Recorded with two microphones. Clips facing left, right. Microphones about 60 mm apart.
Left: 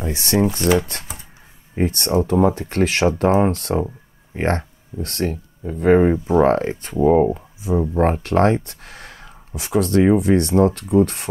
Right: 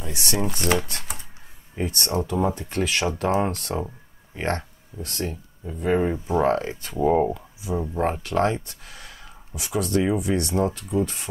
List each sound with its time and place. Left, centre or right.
0.0 s speech: left
1.8 s speech: left
5.0 s speech: left
7.0 s speech: centre
8.0 s speech: left
8.6 s a sound: left
9.6 s speech: left